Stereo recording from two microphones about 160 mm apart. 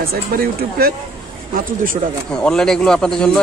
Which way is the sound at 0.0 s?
70° right (ahead or behind).